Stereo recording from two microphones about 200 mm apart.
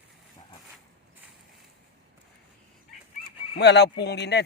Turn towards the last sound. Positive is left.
turn(degrees=55)  # may be behind; listen again after turning